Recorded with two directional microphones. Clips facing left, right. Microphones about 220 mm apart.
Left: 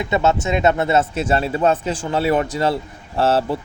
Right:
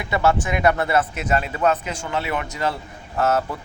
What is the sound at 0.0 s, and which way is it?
Speech, 20° left (ahead or behind).